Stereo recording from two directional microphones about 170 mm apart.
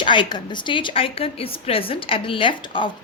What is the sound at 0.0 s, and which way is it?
A woman's voice, 30° left (ahead or behind).